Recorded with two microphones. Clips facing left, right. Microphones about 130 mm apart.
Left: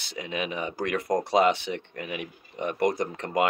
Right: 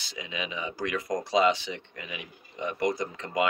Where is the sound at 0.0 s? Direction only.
60° left (ahead or behind).